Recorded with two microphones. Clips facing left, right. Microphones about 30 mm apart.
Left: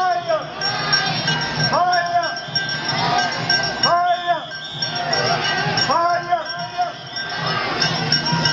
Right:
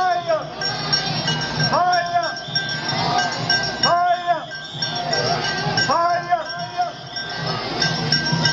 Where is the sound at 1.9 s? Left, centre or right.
Centre.